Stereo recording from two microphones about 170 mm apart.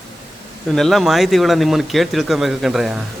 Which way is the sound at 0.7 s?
Centre (ahead or behind).